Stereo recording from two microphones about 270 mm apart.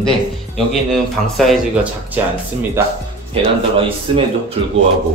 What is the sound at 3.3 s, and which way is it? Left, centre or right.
Speech, centre.